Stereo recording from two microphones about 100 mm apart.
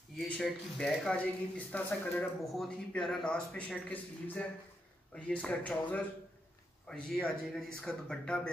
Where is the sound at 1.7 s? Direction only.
15° left (ahead or behind).